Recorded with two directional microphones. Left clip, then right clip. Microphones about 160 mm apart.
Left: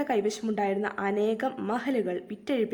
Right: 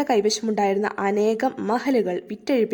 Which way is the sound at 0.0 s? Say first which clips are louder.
Right 7 dB; 35° right (ahead or behind).